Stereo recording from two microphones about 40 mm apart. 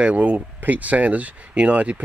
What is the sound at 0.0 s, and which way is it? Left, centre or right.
A man's voice, right.